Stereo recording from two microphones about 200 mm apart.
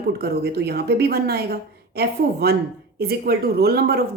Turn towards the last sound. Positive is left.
turn(degrees=-50)  # may be behind; listen again after turning